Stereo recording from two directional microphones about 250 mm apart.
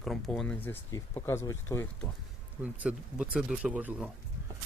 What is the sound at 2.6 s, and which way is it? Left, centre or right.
Speech, centre.